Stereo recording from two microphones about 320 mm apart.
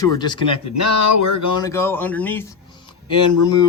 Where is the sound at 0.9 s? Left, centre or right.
Left.